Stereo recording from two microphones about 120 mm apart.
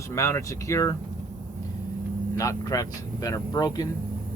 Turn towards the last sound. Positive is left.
turn(degrees=30)  # may be behind; listen again after turning